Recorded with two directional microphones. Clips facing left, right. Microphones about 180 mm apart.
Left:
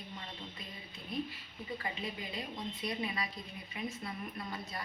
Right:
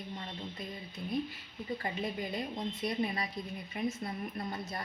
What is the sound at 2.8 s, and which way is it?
A woman's voice, 45° right (ahead or behind).